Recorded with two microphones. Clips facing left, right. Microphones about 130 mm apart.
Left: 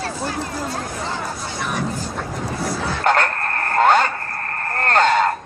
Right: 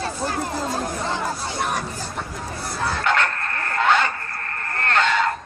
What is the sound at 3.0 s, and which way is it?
Bow-wow, 45° left (ahead or behind).